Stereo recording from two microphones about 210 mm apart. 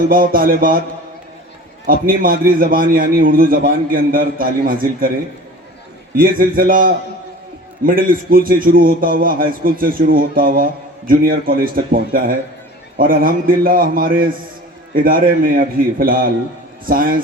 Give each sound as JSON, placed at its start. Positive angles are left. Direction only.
{"t": 0.1, "sound": "a man's voice", "side_deg": -45}
{"t": 1.9, "sound": "a man's voice", "side_deg": -40}
{"t": 6.1, "sound": "a man's voice", "side_deg": -45}